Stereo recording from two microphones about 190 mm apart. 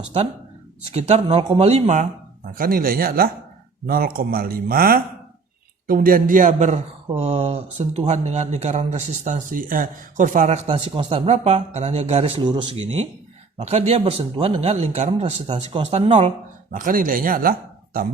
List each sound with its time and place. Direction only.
0.9 s speech: 35° right (ahead or behind)
2.6 s speech: 50° right (ahead or behind); by 16.3 s 35° right (ahead or behind)
16.7 s speech: 45° right (ahead or behind)